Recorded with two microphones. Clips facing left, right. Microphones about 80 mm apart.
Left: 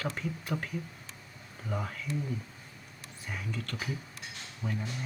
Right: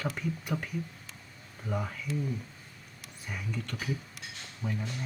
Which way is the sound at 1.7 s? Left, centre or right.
Centre.